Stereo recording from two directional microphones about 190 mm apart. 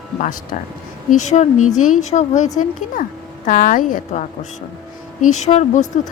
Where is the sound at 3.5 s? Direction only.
45° left (ahead or behind).